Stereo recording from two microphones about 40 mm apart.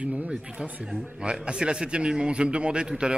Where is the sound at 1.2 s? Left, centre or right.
Right.